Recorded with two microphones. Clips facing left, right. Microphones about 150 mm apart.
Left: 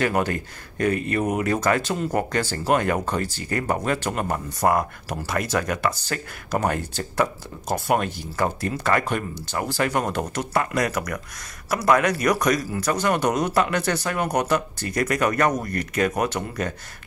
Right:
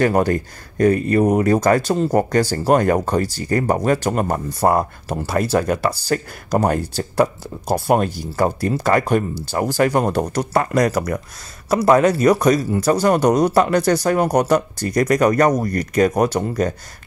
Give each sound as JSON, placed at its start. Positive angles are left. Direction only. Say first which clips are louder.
{"t": 0.0, "sound": "speech", "louder": "right 6 dB", "side_deg": -40}